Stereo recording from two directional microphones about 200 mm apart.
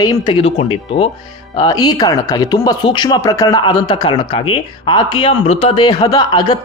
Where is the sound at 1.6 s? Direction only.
20° left (ahead or behind).